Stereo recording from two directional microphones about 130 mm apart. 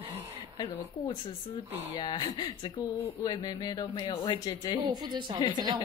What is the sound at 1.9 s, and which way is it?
Speech, 30° left (ahead or behind).